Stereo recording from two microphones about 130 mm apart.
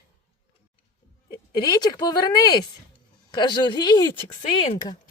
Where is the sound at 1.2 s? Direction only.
30° left (ahead or behind).